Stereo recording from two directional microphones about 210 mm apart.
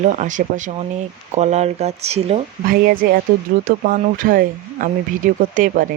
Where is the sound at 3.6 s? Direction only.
40° right (ahead or behind).